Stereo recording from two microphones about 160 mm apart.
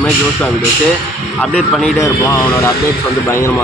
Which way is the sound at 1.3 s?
5° left (ahead or behind).